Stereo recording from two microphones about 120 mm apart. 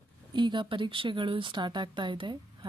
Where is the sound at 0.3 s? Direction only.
40° right (ahead or behind).